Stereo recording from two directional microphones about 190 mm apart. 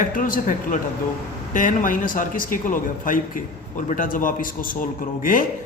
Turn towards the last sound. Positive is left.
turn(degrees=45)  # may be behind; listen again after turning